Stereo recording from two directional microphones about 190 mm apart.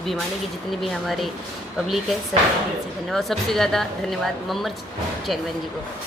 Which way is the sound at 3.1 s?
Centre (ahead or behind).